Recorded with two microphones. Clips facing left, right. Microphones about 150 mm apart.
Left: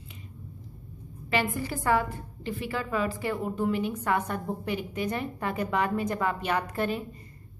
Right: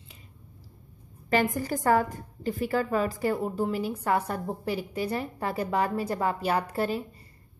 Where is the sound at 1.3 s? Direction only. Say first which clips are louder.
Right 3 dB; 40° right (ahead or behind).